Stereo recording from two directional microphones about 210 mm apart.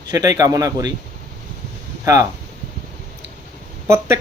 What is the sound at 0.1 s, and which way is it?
Speech, 15° right (ahead or behind).